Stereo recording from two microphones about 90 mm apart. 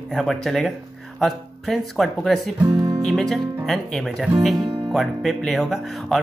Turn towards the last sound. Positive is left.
turn(degrees=0)  # may be behind; listen again after turning